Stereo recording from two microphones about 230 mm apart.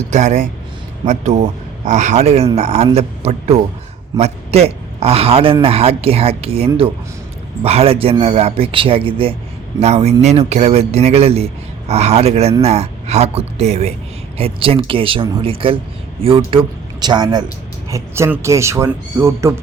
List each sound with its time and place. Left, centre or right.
0.1 s a man's voice: right; by 19.5 s centre